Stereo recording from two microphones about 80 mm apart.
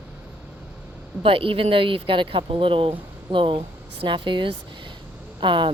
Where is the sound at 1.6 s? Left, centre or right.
Right.